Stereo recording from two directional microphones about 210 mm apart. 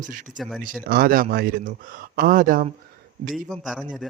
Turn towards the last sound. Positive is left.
turn(degrees=0)  # may be behind; listen again after turning